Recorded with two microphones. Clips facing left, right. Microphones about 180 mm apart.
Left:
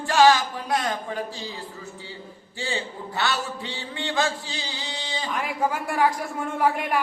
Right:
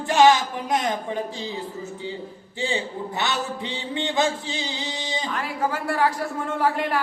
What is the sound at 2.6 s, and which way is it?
A man's voice, 20° right (ahead or behind).